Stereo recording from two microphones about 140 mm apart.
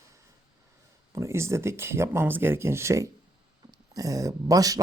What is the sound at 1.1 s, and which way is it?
Speech, 20° right (ahead or behind).